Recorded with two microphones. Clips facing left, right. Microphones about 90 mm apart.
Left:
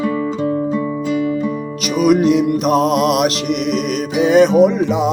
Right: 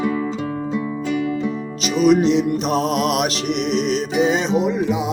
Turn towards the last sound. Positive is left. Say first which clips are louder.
# left 7 dB
turn(degrees=60)  # may be behind; listen again after turning